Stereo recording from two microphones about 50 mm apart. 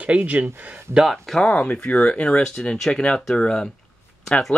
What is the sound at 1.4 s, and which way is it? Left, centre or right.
Speech, centre.